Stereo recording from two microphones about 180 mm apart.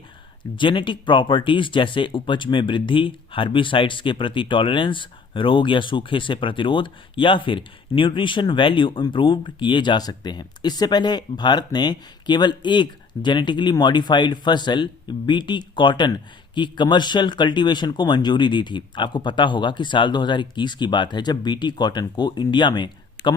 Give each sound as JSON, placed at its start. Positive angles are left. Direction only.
{"t": 0.5, "sound": "speech", "side_deg": 25}